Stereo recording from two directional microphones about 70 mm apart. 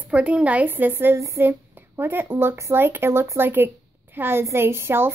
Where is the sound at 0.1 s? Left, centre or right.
Centre.